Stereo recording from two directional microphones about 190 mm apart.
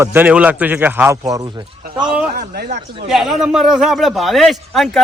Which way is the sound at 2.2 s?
50° right (ahead or behind).